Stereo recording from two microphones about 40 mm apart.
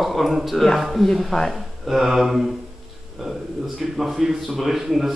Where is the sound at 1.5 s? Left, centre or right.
Centre.